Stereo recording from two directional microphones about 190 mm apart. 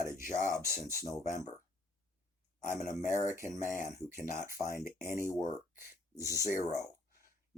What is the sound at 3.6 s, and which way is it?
Speech, 40° left (ahead or behind).